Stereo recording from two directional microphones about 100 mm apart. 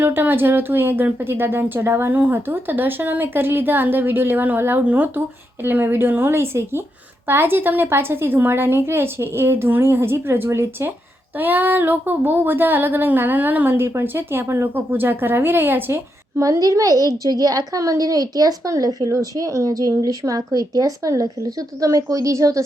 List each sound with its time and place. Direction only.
0.0 s speech: 20° right (ahead or behind)
16.4 s a woman's voice: 35° right (ahead or behind)